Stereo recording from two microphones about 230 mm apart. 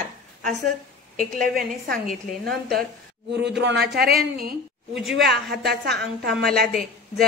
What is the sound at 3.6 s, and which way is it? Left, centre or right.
Speech, right.